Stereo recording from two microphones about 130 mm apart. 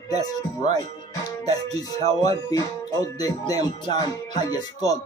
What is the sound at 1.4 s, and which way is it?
Speech, 30° left (ahead or behind).